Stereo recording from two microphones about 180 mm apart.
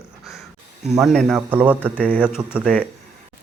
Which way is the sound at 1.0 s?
Centre (ahead or behind).